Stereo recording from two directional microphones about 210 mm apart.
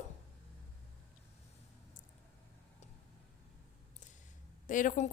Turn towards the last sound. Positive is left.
turn(degrees=35)  # may be behind; listen again after turning